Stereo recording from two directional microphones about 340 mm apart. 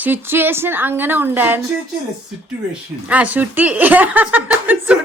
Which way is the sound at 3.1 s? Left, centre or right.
Centre.